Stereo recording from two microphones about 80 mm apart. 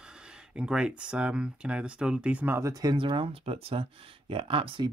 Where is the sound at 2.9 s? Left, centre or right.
Right.